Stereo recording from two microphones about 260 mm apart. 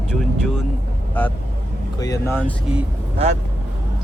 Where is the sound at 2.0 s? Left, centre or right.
Centre.